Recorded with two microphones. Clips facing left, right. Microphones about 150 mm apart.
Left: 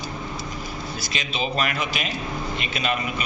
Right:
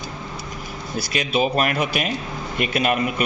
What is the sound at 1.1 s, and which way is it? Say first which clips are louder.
Speech: right 8 dB; 55° right (ahead or behind).